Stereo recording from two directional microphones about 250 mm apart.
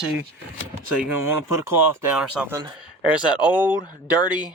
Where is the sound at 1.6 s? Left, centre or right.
Centre.